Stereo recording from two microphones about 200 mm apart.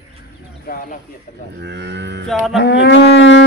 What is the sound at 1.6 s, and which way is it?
Livestock, 60° right (ahead or behind).